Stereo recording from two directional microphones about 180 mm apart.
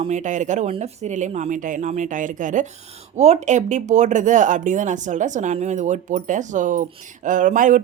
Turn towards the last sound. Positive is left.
turn(degrees=-45)  # may be behind; listen again after turning